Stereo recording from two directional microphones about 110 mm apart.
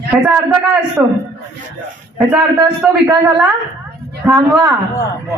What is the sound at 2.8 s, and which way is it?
Speech, 5° right (ahead or behind).